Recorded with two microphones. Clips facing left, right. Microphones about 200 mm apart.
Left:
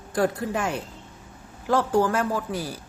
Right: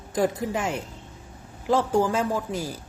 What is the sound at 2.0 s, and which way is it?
Speech, 10° right (ahead or behind).